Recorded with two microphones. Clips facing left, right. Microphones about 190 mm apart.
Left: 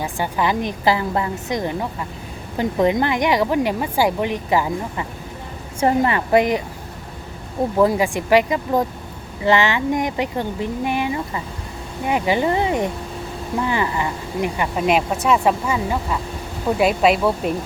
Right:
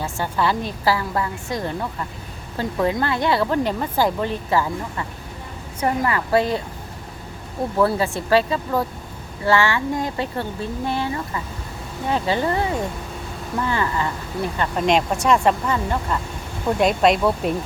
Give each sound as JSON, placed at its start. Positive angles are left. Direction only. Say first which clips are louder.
{"t": 0.0, "sound": "a woman's voice", "louder": "left 1 dB", "side_deg": 15}
{"t": 7.8, "sound": "speech", "louder": "left 2 dB", "side_deg": 15}